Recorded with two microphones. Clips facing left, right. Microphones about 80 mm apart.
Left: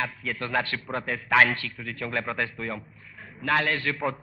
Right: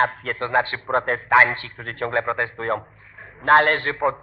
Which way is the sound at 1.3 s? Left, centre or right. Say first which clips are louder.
Right 4 dB; right.